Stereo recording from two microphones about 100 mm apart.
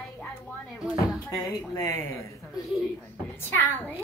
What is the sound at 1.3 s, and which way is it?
Speech, 35° left (ahead or behind).